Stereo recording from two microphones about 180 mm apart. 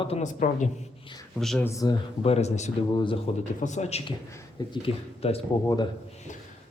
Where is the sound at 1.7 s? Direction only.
20° left (ahead or behind).